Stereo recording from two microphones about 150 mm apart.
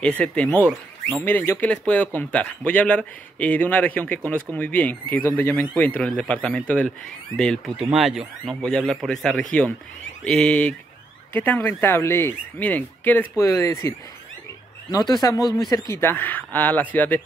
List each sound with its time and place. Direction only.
0.0 s speech: 5° left (ahead or behind)